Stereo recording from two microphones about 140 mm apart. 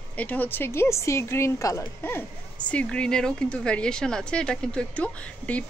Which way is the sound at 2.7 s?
10° left (ahead or behind).